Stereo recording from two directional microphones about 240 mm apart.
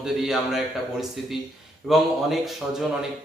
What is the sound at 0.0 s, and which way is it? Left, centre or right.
A man's voice, centre.